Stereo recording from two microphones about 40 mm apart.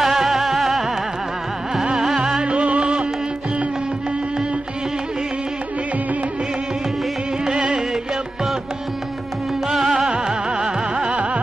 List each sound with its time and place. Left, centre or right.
0.0 s music: centre
2.0 s music: centre
2.4 s music: right
7.4 s music: centre
9.7 s music: centre
10.0 s music: centre